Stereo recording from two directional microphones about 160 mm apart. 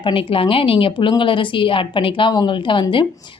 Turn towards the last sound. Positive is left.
turn(degrees=30)  # may be behind; listen again after turning